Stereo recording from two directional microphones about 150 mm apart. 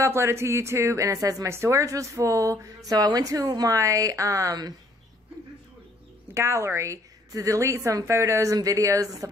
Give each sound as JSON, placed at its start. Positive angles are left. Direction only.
{"t": 0.0, "sound": "a woman's voice", "side_deg": -15}
{"t": 6.3, "sound": "a woman's voice", "side_deg": -20}